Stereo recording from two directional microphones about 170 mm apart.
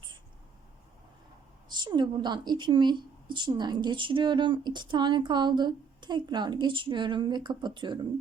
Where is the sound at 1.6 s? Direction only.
25° right (ahead or behind).